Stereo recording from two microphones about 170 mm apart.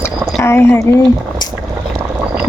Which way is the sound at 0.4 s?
15° left (ahead or behind).